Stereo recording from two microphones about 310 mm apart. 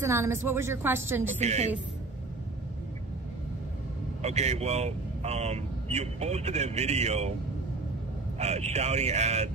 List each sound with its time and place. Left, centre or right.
0.0 s a woman's voice: centre
1.4 s speech: right
4.2 s speech: right
8.4 s speech: right